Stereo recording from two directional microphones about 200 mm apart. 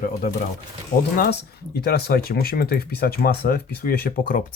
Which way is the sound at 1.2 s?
50° left (ahead or behind).